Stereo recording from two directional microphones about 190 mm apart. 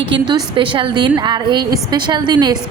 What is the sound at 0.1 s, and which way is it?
A woman's voice, 25° right (ahead or behind).